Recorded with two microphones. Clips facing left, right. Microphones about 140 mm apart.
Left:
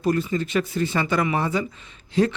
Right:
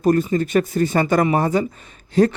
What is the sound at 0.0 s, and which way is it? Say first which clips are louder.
Speech: right 5 dB; 45° right (ahead or behind).